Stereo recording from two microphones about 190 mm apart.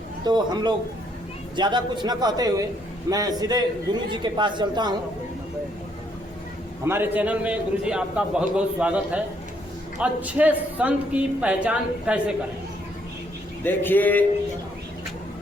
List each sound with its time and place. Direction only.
0.3 s a man's voice: 20° right (ahead or behind)
6.8 s a man's voice: 10° right (ahead or behind)
13.7 s speech: 10° left (ahead or behind)